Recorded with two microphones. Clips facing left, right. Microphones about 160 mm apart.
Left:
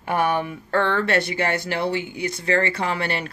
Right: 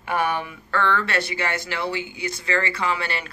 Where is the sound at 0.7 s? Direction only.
45° left (ahead or behind).